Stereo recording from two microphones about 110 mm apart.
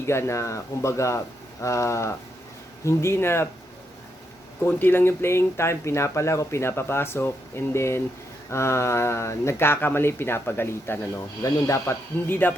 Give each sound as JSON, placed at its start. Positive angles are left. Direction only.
{"t": 0.0, "sound": "speech", "side_deg": 25}
{"t": 4.6, "sound": "speech", "side_deg": 20}